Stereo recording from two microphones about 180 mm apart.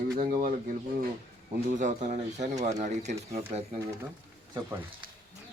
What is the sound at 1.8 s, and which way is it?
Speech, 40° right (ahead or behind).